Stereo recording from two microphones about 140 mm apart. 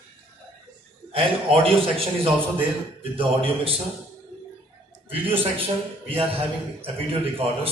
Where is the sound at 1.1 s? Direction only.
40° right (ahead or behind).